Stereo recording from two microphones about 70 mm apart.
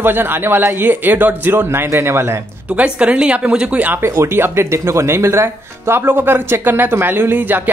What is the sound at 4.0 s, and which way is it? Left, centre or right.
Speech, right.